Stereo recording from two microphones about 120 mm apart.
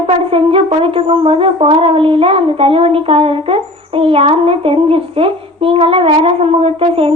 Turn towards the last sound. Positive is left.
turn(degrees=-50)  # may be behind; listen again after turning